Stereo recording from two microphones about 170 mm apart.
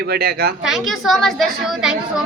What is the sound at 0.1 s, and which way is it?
Speech, 65° right (ahead or behind).